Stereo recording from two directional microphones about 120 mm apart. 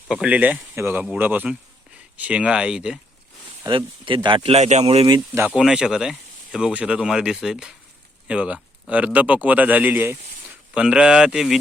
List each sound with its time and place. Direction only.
0.1 s speech: 10° right (ahead or behind)
3.7 s speech: 45° right (ahead or behind)
4.4 s speech: 65° right (ahead or behind)
5.3 s speech: 20° right (ahead or behind)
5.5 s speech: 5° right (ahead or behind)